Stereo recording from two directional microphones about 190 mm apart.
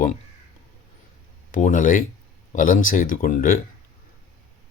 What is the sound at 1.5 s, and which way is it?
Speech, 45° left (ahead or behind).